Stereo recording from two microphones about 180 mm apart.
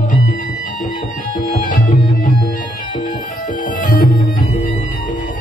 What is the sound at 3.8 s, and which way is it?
Music, 50° left (ahead or behind).